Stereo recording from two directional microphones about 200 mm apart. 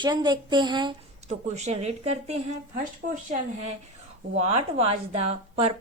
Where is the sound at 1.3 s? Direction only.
35° right (ahead or behind).